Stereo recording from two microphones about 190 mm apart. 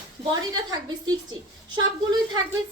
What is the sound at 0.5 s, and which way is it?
Speech, 20° right (ahead or behind).